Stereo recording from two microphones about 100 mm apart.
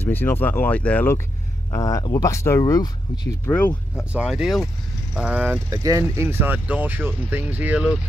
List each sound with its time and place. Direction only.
0.0 s speech: 20° left (ahead or behind)
1.7 s speech: 35° left (ahead or behind)
3.5 s speech: 20° left (ahead or behind)
4.1 s speech: 10° right (ahead or behind)
5.7 s speech: 35° right (ahead or behind); by 8.0 s 10° right (ahead or behind)